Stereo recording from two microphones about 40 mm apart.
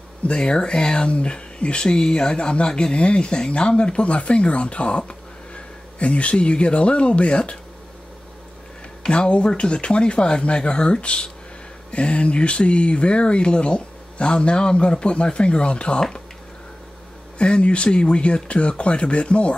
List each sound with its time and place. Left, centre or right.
0.2 s speech: left
9.0 s speech: centre
17.4 s speech: left